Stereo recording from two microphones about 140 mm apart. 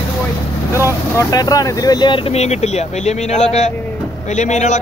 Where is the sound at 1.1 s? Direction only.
25° left (ahead or behind).